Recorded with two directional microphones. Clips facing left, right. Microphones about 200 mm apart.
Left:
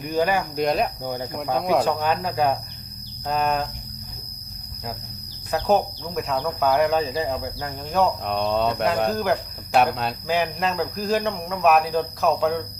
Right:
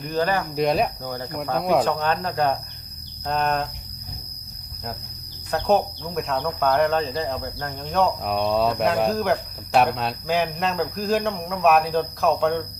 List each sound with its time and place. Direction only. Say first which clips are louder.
0.0 s speech: left 1 dB; 10° left (ahead or behind)
0.5 s speech: right 1 dB; centre (ahead or behind)
1.0 s speech: left 2 dB; 15° left (ahead or behind)
1.3 s speech: right 1 dB; centre (ahead or behind)
5.5 s speech: even; centre (ahead or behind)